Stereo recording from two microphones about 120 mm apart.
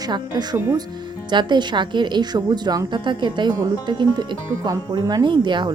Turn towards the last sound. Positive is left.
turn(degrees=-40)  # may be behind; listen again after turning